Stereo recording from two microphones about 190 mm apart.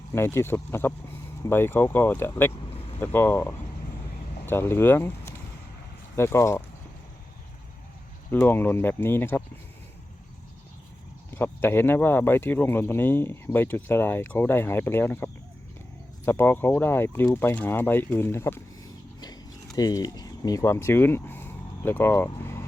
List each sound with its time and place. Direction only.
0.1 s speech: 15° left (ahead or behind)
2.6 s vehicle: 30° left (ahead or behind)
3.0 s speech: 10° left (ahead or behind)
4.4 s speech: 10° left (ahead or behind)
8.3 s speech: 10° left (ahead or behind)
11.3 s speech: 10° left (ahead or behind)
19.7 s speech: 20° left (ahead or behind)